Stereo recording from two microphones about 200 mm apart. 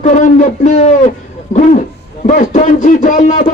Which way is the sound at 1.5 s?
40° left (ahead or behind).